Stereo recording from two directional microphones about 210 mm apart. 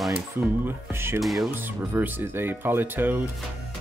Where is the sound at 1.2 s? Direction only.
Centre (ahead or behind).